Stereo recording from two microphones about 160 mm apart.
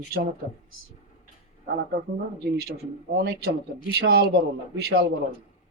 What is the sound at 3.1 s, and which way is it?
A man's voice, 85° right.